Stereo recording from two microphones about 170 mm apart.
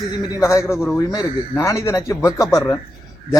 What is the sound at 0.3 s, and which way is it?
A man's voice, 15° left (ahead or behind).